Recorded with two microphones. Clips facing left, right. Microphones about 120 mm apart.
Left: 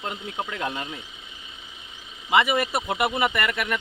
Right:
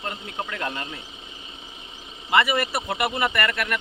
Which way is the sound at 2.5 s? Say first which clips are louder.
Left 1 dB; 15° left (ahead or behind).